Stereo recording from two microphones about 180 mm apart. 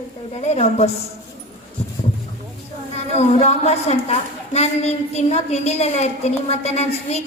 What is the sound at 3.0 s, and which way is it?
A woman's voice, 35° left (ahead or behind).